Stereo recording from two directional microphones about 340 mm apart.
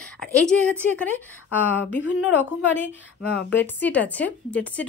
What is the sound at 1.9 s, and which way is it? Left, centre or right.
Speech, left.